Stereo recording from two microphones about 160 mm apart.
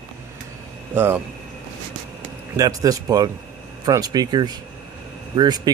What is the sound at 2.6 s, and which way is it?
Speech, 20° right (ahead or behind).